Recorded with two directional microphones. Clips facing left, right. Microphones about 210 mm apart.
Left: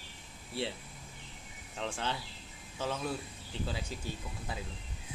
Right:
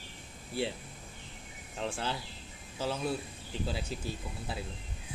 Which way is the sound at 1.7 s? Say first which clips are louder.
Right 1 dB; 5° right (ahead or behind).